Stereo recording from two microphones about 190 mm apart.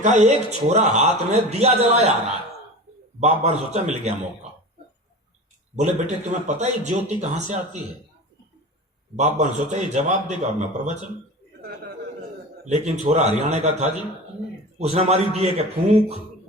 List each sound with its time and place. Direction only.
0.0 s a man's voice: 40° right (ahead or behind)
3.2 s a man's voice: 35° right (ahead or behind)
5.7 s a man's voice: 40° right (ahead or behind)
9.1 s a man's voice: 40° right (ahead or behind)
12.6 s a man's voice: 40° right (ahead or behind)